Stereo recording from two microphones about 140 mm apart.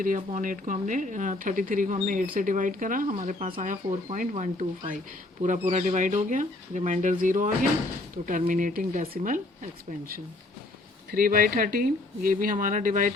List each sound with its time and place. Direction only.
0.3 s speech: 65° right (ahead or behind)
11.1 s speech: 90° right; by 13.1 s 65° right (ahead or behind)